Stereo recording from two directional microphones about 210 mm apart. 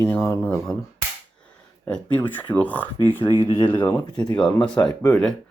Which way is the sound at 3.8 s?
5° left (ahead or behind).